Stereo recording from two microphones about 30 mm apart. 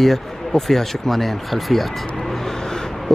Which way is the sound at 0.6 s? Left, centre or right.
Centre.